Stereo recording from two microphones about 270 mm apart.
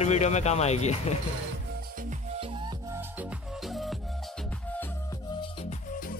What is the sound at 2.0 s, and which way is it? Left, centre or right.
Music, right.